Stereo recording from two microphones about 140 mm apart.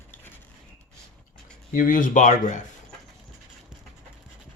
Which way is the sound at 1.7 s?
70° left (ahead or behind).